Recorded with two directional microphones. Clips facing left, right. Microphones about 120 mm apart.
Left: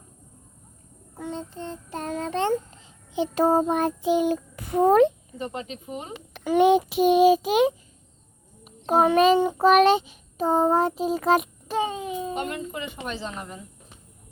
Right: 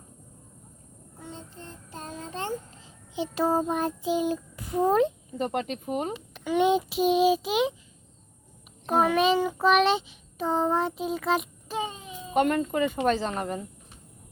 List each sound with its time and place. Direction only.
1.2 s child singing: 75° left (ahead or behind)
3.2 s child singing: 50° left (ahead or behind); by 5.1 s 65° left (ahead or behind)
5.4 s speech: 50° right (ahead or behind)
6.4 s a child's voice: 50° left (ahead or behind)
8.9 s a child's voice: 40° left (ahead or behind)
11.7 s baby cry: 70° left (ahead or behind)
12.3 s speech: 50° right (ahead or behind)